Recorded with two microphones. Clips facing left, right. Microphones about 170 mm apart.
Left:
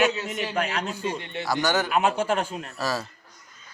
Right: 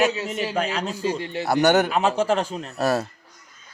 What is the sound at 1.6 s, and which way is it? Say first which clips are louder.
Speech: right 8 dB; 65° right (ahead or behind).